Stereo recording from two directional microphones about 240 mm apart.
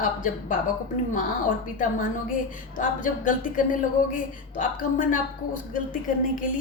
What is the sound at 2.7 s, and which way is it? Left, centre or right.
Speech, left.